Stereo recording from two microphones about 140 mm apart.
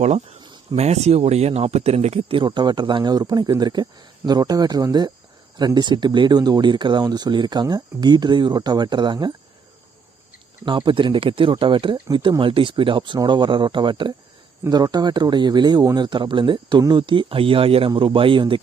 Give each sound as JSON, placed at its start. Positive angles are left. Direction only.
{"t": 0.0, "sound": "speech", "side_deg": -55}
{"t": 0.4, "sound": "cricket", "side_deg": -35}
{"t": 0.8, "sound": "speech", "side_deg": -50}
{"t": 10.7, "sound": "speech", "side_deg": -35}